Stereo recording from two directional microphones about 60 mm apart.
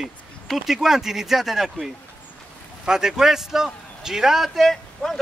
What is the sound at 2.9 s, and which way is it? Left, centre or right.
A man's voice, centre.